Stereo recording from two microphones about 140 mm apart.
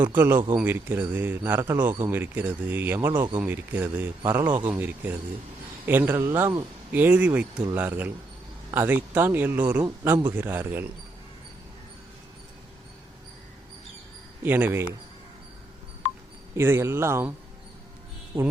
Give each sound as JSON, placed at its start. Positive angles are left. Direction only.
{"t": 0.0, "sound": "speech", "side_deg": -15}
{"t": 14.4, "sound": "speech", "side_deg": -15}
{"t": 16.6, "sound": "speech", "side_deg": -15}
{"t": 18.3, "sound": "speech", "side_deg": -40}